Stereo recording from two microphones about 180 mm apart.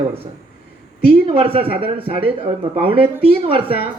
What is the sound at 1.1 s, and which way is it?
Speech, 30° right (ahead or behind).